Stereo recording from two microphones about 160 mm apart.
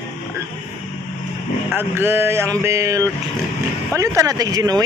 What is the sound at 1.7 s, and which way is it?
Speech, 15° right (ahead or behind).